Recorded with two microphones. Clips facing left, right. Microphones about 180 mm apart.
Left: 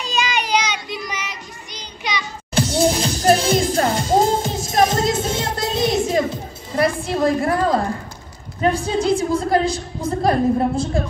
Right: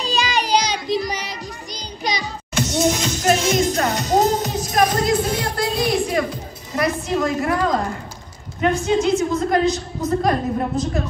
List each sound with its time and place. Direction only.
0.0 s music: 35° right (ahead or behind)
2.5 s music: 30° left (ahead or behind)
8.5 s a woman's voice: 30° left (ahead or behind)